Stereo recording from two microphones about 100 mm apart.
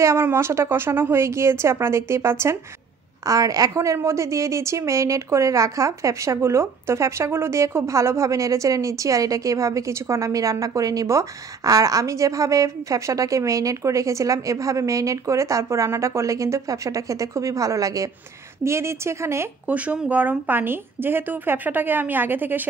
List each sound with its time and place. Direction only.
0.0 s a woman's voice: 25° right (ahead or behind)
3.3 s a woman's voice: 35° right (ahead or behind)
19.7 s a woman's voice: 15° right (ahead or behind)